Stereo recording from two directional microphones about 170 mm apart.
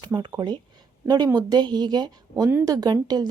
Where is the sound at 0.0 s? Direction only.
25° right (ahead or behind).